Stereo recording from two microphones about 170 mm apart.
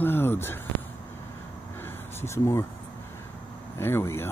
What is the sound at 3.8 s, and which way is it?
Speech, 15° left (ahead or behind).